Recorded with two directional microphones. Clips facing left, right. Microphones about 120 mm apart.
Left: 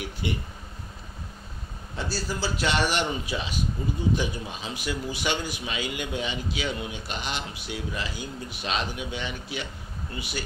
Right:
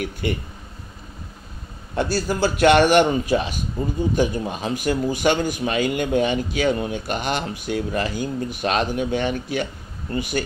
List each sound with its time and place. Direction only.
0.0 s speech: 50° right (ahead or behind)
2.0 s a man's voice: 60° right (ahead or behind)